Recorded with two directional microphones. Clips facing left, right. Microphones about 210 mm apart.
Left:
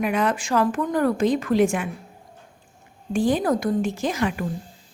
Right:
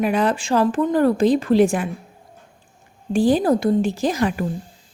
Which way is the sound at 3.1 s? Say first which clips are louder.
Right 4 dB; 35° right (ahead or behind).